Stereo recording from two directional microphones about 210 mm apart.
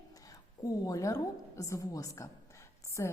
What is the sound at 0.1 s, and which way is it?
A woman's voice, 15° left (ahead or behind).